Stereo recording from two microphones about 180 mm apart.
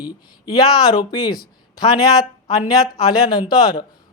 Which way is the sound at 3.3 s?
25° left (ahead or behind).